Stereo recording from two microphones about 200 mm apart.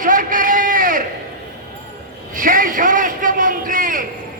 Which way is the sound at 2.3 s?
45° right (ahead or behind).